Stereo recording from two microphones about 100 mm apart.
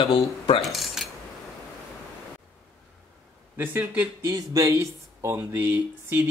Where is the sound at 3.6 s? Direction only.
20° right (ahead or behind).